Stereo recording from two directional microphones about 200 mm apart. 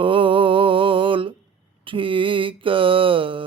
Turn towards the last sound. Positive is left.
turn(degrees=-25)  # may be behind; listen again after turning